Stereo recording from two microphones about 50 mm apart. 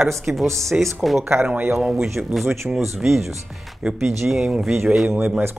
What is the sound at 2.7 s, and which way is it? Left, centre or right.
Speech, centre.